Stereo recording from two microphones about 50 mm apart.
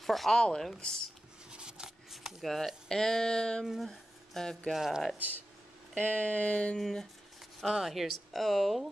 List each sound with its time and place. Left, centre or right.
0.0 s speech: centre
0.4 s speech: centre
1.5 s scissors: centre
2.0 s speech: centre
3.6 s speech: centre
4.7 s speech: centre
5.9 s a sound: left
6.8 s speech: centre
7.6 s speech: centre